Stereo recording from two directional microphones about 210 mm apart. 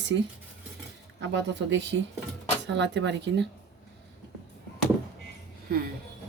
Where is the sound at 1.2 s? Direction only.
55° right (ahead or behind).